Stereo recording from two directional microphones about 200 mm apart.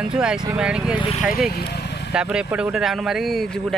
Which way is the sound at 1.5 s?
55° left (ahead or behind).